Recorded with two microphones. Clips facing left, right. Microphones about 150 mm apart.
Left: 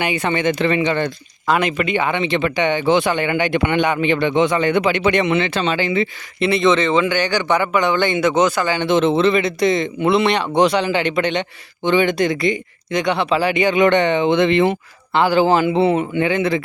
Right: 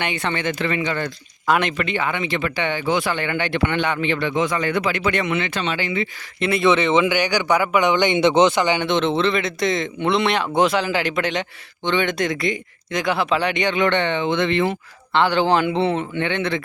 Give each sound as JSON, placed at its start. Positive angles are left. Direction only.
{"t": 0.0, "sound": "speech", "side_deg": 10}
{"t": 1.5, "sound": "a man's voice", "side_deg": 0}
{"t": 2.0, "sound": "speech", "side_deg": 25}
{"t": 6.4, "sound": "speech", "side_deg": -5}
{"t": 8.9, "sound": "speech", "side_deg": 5}
{"t": 15.1, "sound": "a man's voice", "side_deg": 5}